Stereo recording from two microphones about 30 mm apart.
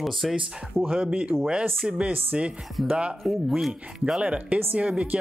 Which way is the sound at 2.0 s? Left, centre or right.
Right.